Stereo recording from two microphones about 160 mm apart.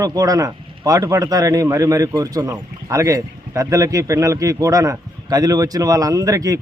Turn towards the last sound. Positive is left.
turn(degrees=-20)  # may be behind; listen again after turning